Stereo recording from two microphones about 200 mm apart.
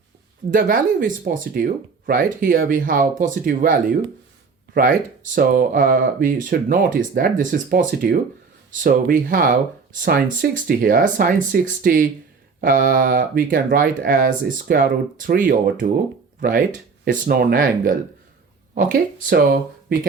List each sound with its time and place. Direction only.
0.5 s speech: 40° right (ahead or behind)